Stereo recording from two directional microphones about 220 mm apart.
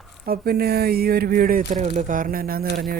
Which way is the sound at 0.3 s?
45° right (ahead or behind).